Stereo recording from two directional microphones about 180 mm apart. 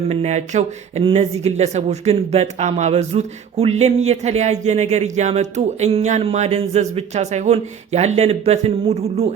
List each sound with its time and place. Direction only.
0.1 s speech: 35° right (ahead or behind)